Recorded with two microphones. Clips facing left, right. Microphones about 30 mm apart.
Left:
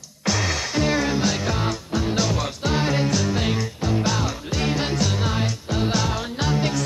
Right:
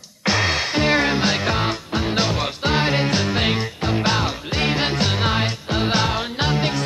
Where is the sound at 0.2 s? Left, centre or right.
Right.